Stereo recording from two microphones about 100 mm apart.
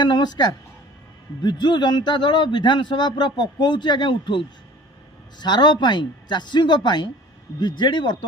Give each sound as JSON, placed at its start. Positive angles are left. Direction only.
{"t": 0.0, "sound": "speech", "side_deg": 45}
{"t": 5.4, "sound": "speech", "side_deg": 50}